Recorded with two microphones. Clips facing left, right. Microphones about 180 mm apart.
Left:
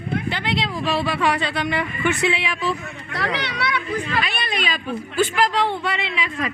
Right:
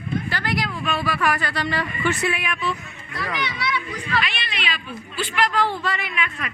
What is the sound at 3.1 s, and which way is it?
Speech, 75° left (ahead or behind).